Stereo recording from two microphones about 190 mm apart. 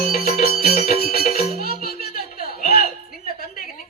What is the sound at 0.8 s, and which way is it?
Music, 50° left (ahead or behind).